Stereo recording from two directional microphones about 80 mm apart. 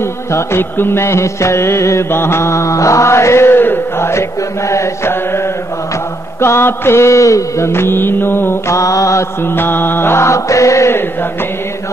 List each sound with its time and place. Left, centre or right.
0.0 s music: left
8.7 s mantra: left
9.4 s music: left